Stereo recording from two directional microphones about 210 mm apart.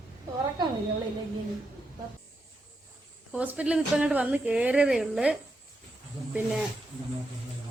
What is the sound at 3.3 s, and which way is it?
A woman's voice, 5° right (ahead or behind).